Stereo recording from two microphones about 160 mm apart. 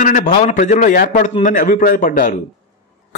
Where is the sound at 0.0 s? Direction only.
55° left (ahead or behind).